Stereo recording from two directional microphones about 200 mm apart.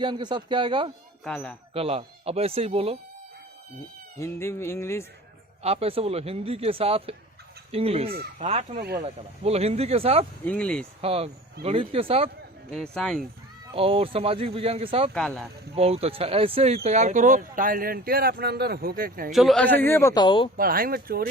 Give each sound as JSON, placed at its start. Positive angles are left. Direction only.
{"t": 0.0, "sound": "speech", "side_deg": -25}
{"t": 1.2, "sound": "speech", "side_deg": 5}
{"t": 1.7, "sound": "speech", "side_deg": -30}
{"t": 4.2, "sound": "a man's voice", "side_deg": 15}
{"t": 5.6, "sound": "speech", "side_deg": -30}
{"t": 10.4, "sound": "speech", "side_deg": 5}
{"t": 11.0, "sound": "speech", "side_deg": -30}
{"t": 12.7, "sound": "speech", "side_deg": 5}
{"t": 13.7, "sound": "speech", "side_deg": -30}
{"t": 15.1, "sound": "speech", "side_deg": 5}
{"t": 15.7, "sound": "speech", "side_deg": -30}
{"t": 19.3, "sound": "a man's voice", "side_deg": 0}
{"t": 20.6, "sound": "speech", "side_deg": -45}